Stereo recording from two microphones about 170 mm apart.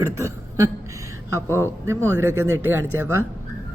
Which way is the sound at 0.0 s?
15° right (ahead or behind).